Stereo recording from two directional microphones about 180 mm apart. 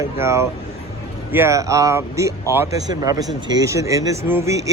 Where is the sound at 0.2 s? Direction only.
15° right (ahead or behind).